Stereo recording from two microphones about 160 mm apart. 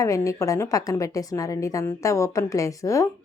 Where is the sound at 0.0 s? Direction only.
20° left (ahead or behind).